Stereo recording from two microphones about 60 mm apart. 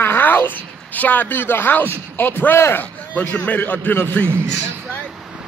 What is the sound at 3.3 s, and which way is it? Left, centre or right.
Speech, left.